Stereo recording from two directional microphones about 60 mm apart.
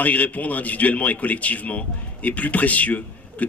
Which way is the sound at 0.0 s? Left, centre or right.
Left.